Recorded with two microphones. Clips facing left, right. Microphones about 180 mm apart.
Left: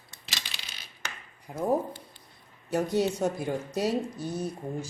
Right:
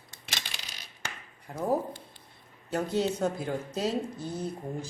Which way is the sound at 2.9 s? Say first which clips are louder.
Even; 15° left (ahead or behind).